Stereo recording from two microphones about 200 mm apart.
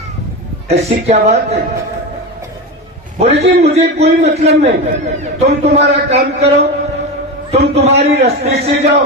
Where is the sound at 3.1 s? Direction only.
30° right (ahead or behind).